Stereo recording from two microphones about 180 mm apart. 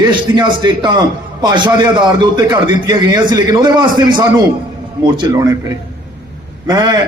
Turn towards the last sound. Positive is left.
turn(degrees=-20)  # may be behind; listen again after turning